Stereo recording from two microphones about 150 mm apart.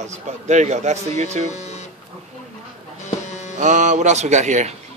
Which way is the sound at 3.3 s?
50° left (ahead or behind).